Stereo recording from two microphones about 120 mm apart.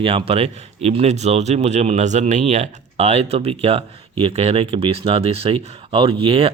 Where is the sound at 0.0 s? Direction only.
50° right (ahead or behind).